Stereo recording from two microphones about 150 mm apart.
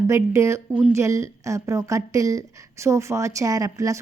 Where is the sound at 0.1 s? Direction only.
20° right (ahead or behind).